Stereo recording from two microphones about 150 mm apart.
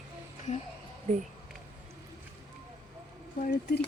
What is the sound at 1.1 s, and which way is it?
Speech, 50° right (ahead or behind).